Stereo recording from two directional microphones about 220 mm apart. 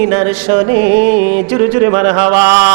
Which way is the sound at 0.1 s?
20° right (ahead or behind).